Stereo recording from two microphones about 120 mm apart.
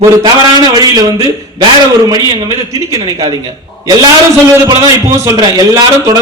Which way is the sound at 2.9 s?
30° right (ahead or behind).